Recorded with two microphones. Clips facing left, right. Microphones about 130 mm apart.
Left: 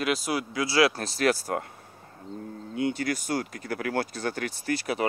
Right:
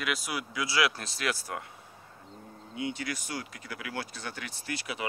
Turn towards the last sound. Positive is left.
turn(degrees=45)  # may be behind; listen again after turning